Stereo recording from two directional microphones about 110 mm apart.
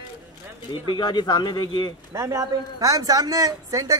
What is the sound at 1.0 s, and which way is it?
Speech, 40° left (ahead or behind).